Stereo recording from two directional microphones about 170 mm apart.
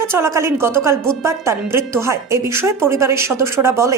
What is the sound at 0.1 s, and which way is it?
A woman's voice, 15° right (ahead or behind).